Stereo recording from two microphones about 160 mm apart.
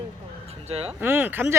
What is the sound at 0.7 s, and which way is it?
Speech, 40° right (ahead or behind).